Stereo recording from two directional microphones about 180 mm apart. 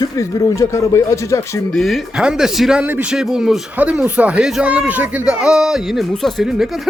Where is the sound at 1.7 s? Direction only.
Centre (ahead or behind).